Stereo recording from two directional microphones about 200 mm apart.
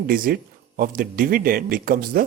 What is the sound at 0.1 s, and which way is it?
A woman's voice, 45° right (ahead or behind).